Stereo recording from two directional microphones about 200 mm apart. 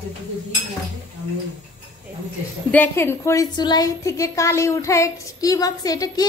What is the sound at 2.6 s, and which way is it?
A woman's voice, 10° left (ahead or behind).